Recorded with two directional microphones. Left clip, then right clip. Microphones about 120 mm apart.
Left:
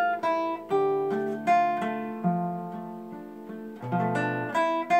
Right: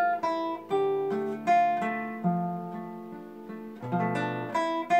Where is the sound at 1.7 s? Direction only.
20° left (ahead or behind).